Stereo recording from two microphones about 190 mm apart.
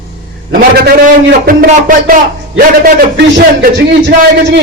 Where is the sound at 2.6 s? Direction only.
55° right (ahead or behind).